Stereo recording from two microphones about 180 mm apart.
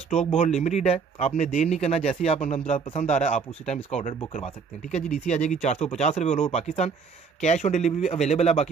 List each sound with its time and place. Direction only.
0.1 s speech: 35° left (ahead or behind)